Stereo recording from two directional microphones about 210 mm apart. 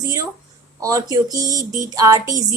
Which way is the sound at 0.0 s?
15° right (ahead or behind).